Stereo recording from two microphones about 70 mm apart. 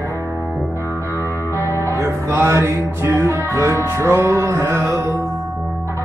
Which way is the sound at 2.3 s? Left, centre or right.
Right.